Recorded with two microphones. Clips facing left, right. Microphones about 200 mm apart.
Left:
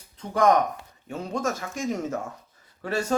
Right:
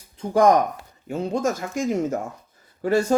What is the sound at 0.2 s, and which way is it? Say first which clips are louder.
Speech: right 4 dB; 30° right (ahead or behind).